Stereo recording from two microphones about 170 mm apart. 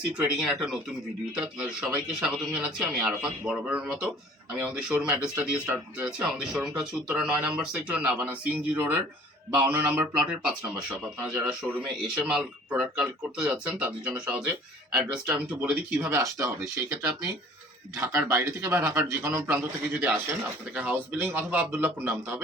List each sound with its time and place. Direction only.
0.3 s a man's voice: centre (ahead or behind)
16.0 s a man's voice: 15° right (ahead or behind)